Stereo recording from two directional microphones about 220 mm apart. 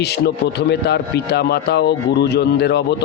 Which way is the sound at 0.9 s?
50° left (ahead or behind).